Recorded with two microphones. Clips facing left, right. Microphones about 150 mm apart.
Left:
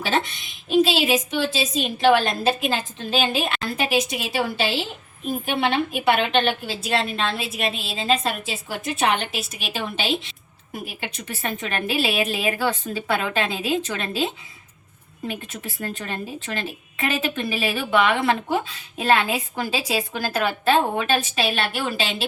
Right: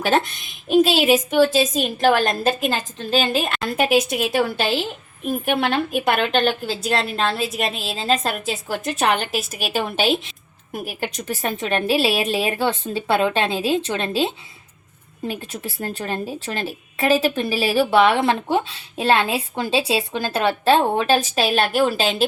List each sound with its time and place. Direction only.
0.0 s a woman's voice: 50° right (ahead or behind)